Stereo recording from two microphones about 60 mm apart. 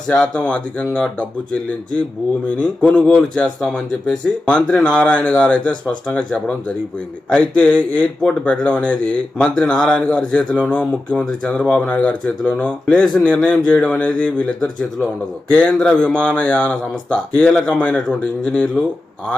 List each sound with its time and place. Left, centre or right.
0.1 s a man's voice: centre
2.6 s a man's voice: centre
12.5 s a man's voice: left